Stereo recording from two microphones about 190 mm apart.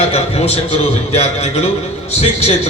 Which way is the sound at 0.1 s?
30° left (ahead or behind).